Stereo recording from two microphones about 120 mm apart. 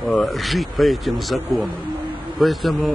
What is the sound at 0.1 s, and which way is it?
Speech, centre (ahead or behind).